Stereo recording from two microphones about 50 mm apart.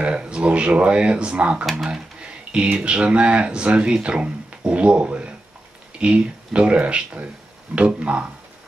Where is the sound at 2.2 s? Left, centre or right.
Right.